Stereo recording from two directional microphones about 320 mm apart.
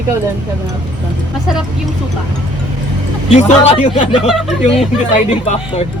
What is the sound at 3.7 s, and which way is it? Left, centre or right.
Speech, centre.